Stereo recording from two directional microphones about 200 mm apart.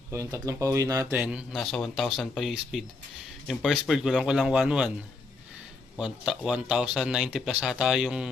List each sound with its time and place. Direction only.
0.1 s speech: 15° right (ahead or behind)
1.2 s speech: centre (ahead or behind)
6.0 s speech: 5° right (ahead or behind)